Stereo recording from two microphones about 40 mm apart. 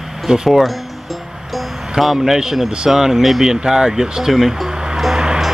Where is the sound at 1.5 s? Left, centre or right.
Centre.